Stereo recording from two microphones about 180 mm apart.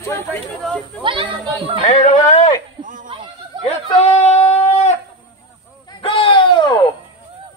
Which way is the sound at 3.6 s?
40° left (ahead or behind).